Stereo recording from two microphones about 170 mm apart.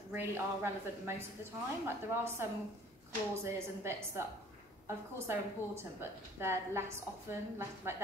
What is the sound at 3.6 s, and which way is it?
A woman's voice, 15° right (ahead or behind).